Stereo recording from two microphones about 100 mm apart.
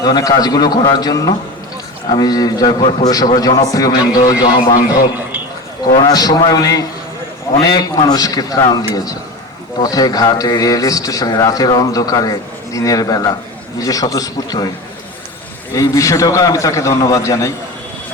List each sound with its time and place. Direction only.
0.0 s a man's voice: 40° left (ahead or behind)
5.9 s a man's voice: 40° left (ahead or behind)
15.7 s a man's voice: 35° left (ahead or behind)